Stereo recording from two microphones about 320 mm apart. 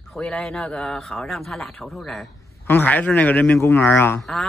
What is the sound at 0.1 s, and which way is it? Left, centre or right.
A man's voice, centre.